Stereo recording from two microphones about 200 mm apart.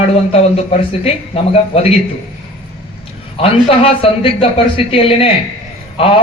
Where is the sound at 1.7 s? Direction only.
30° left (ahead or behind).